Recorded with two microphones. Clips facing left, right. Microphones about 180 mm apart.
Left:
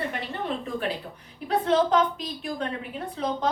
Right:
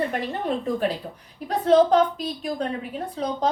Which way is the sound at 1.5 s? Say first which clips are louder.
Right 5 dB; 35° right (ahead or behind).